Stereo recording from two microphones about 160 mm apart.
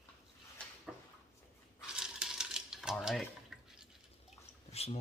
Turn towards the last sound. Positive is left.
turn(degrees=40)  # may be behind; listen again after turning